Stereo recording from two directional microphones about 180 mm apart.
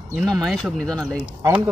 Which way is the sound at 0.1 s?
Centre (ahead or behind).